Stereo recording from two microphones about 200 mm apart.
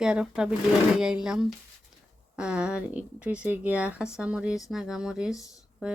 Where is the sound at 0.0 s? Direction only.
5° right (ahead or behind).